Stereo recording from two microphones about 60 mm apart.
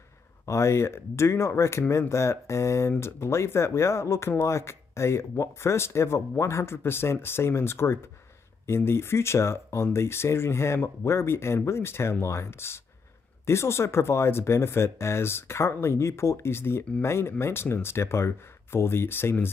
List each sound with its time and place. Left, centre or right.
0.5 s speech: left